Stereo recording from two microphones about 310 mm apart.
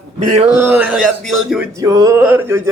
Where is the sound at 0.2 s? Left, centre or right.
Right.